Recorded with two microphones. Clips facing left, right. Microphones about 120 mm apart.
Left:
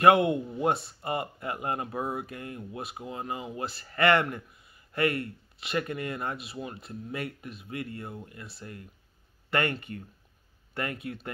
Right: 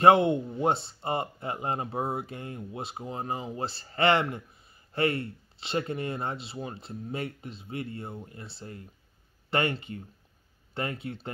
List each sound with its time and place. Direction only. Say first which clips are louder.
0.0 s speech: right 1 dB; 25° right (ahead or behind)